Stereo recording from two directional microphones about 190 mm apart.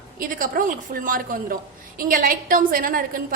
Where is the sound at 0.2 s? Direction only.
45° right (ahead or behind).